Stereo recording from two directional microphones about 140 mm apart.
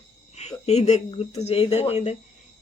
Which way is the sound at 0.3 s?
50° left (ahead or behind).